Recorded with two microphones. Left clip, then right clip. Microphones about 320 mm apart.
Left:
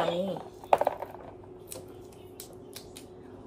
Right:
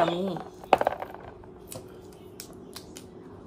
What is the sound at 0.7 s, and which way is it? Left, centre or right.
Typing, right.